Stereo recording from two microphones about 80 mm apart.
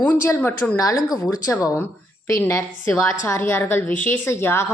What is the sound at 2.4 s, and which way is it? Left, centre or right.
A woman's voice, left.